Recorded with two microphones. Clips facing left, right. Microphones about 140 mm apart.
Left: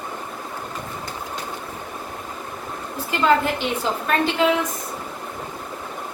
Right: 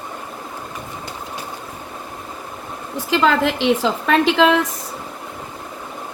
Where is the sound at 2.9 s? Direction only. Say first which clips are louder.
Right 2 dB; 90° right.